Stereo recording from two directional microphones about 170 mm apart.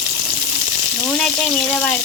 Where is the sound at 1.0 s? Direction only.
5° left (ahead or behind).